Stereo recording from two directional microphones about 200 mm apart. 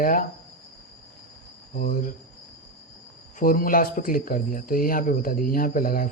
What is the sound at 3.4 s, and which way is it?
Speech, 45° left (ahead or behind).